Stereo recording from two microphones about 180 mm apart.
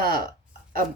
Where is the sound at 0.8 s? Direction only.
55° left (ahead or behind).